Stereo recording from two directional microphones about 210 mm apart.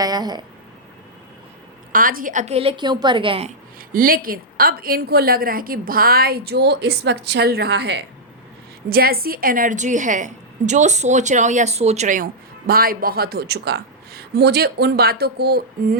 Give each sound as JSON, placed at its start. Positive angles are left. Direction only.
{"t": 0.0, "sound": "speech", "side_deg": -20}
{"t": 1.9, "sound": "a woman's voice", "side_deg": -40}
{"t": 3.8, "sound": "a woman's voice", "side_deg": -40}